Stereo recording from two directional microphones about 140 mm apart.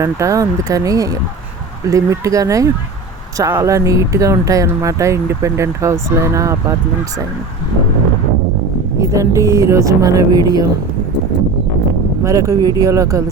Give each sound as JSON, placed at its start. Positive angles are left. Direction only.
{"t": 0.0, "sound": "speech", "side_deg": -20}
{"t": 9.0, "sound": "speech", "side_deg": -20}
{"t": 12.2, "sound": "speech", "side_deg": -25}